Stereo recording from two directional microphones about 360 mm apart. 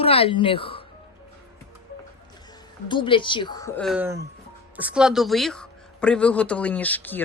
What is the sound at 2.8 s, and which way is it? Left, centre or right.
A woman's voice, centre.